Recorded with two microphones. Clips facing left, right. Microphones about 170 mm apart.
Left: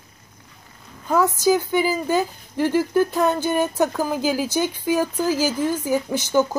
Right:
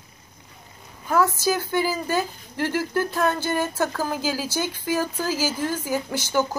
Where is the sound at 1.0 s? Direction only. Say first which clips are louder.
Left 3 dB; 20° left (ahead or behind).